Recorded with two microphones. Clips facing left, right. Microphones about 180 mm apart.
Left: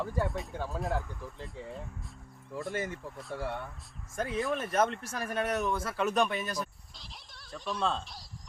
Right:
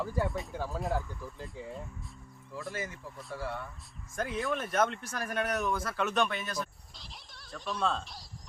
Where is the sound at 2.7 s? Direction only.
55° left (ahead or behind).